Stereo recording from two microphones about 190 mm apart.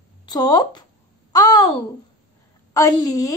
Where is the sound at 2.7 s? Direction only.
20° left (ahead or behind).